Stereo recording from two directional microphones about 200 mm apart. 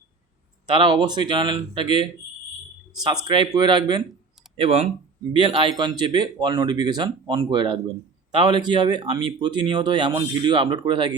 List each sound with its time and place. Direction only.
0.7 s speech: 25° right (ahead or behind)
3.2 s speech: 25° right (ahead or behind)